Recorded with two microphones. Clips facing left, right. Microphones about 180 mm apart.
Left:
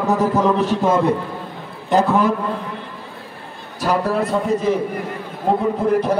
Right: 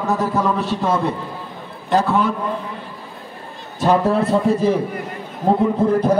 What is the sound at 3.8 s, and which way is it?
A man's voice, 25° right (ahead or behind).